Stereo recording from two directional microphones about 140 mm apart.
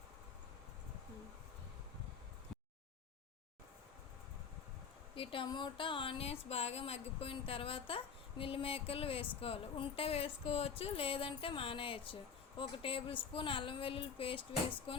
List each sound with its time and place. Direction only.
5.1 s speech: 40° left (ahead or behind)